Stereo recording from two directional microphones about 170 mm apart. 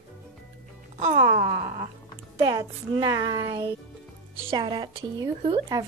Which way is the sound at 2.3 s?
20° right (ahead or behind).